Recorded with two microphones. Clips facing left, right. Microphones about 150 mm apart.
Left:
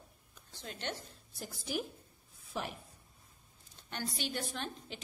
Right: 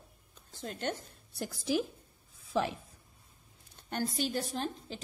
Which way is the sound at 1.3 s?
80° right.